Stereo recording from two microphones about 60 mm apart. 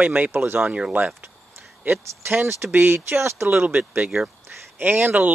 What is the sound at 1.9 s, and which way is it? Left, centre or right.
Speech, right.